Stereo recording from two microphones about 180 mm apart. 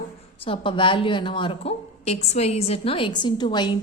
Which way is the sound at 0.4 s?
30° left (ahead or behind).